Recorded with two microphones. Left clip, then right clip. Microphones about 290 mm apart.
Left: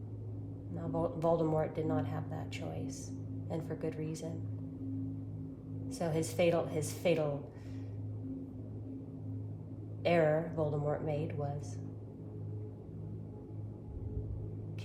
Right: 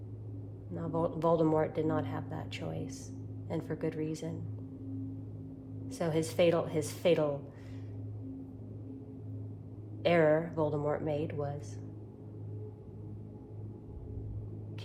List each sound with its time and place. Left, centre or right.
0.8 s speech: right
5.9 s speech: right
10.0 s speech: right